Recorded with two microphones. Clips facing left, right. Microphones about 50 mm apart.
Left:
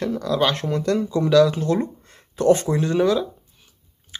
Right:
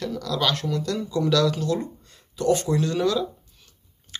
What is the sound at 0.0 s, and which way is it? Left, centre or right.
Speech, left.